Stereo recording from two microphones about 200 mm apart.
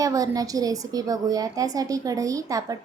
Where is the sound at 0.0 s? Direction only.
15° right (ahead or behind).